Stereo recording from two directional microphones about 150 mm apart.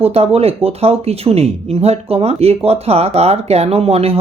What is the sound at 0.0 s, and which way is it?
Speech, 40° right (ahead or behind).